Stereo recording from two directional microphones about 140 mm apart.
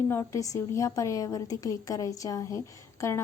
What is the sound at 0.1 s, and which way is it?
A woman's voice, 20° left (ahead or behind).